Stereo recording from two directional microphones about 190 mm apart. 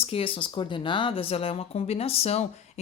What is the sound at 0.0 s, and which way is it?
Speech, 30° left (ahead or behind).